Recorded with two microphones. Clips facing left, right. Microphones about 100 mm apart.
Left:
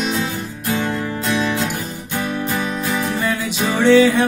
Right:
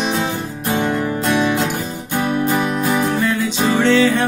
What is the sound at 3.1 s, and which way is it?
Music, 10° left (ahead or behind).